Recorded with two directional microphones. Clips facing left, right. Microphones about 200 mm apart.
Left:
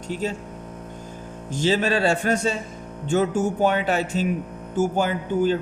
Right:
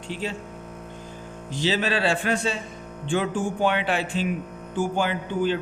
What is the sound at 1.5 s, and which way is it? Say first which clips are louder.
A man's voice: left 3 dB; 45° left (ahead or behind).